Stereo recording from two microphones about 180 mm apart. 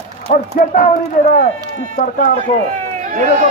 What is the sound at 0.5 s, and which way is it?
Speech, 45° left (ahead or behind).